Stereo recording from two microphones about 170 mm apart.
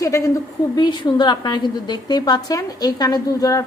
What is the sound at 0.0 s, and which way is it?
A woman's voice, 20° left (ahead or behind).